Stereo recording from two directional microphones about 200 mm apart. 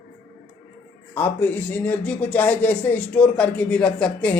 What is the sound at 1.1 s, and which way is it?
Speech, 10° left (ahead or behind).